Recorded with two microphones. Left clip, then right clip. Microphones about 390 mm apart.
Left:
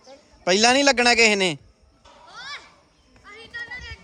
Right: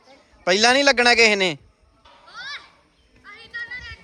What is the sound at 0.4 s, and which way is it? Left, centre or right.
Speech, centre.